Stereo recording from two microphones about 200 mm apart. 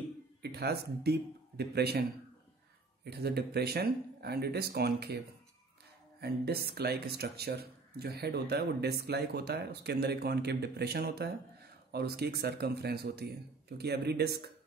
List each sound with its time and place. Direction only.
0.4 s speech: 55° right (ahead or behind)
3.1 s speech: 55° right (ahead or behind)
6.2 s speech: 55° right (ahead or behind)